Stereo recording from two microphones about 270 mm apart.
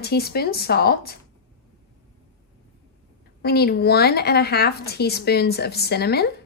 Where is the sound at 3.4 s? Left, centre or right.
Left.